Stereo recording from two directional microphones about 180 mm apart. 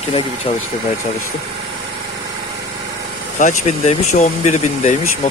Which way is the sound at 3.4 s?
40° left (ahead or behind).